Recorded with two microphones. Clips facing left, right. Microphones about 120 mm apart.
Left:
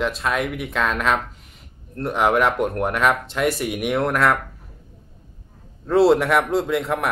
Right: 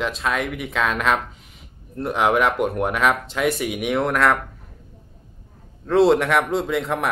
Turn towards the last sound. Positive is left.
turn(degrees=0)  # may be behind; listen again after turning